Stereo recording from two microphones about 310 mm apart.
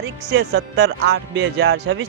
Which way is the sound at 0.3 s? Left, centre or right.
Right.